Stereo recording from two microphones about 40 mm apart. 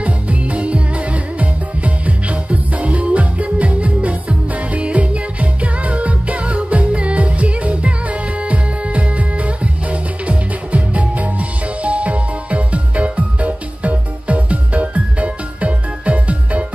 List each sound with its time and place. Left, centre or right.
0.0 s music: right